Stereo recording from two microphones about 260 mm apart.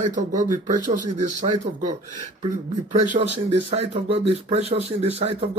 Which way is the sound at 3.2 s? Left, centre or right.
Right.